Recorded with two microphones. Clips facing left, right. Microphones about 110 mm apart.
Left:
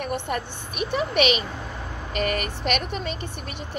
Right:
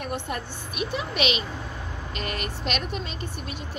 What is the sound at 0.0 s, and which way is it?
Speech, 55° left (ahead or behind).